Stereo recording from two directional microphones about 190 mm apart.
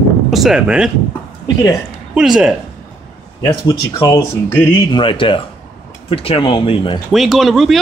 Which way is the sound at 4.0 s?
20° left (ahead or behind).